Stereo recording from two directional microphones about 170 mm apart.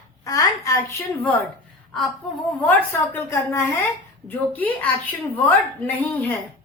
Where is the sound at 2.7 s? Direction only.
10° left (ahead or behind).